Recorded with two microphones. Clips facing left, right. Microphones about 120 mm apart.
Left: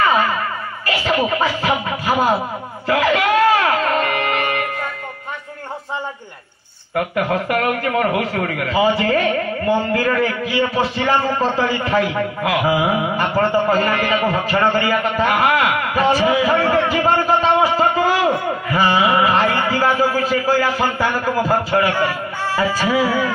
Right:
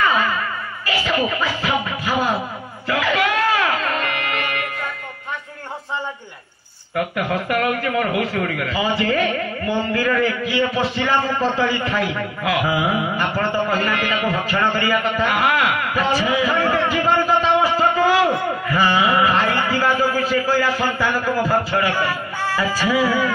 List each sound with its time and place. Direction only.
0.0 s a sound: 40° left (ahead or behind)
0.8 s speech: 40° left (ahead or behind)
2.9 s music: 40° left (ahead or behind)
7.0 s a man's voice: 40° left (ahead or behind)